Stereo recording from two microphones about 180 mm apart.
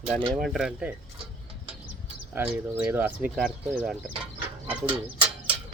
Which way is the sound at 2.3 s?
5° right (ahead or behind).